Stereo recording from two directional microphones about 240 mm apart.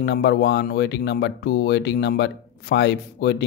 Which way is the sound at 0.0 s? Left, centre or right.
Left.